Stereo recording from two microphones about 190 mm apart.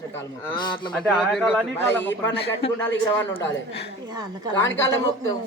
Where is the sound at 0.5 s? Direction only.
25° left (ahead or behind).